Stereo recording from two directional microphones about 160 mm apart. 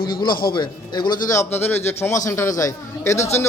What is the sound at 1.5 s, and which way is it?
Speech, 15° left (ahead or behind).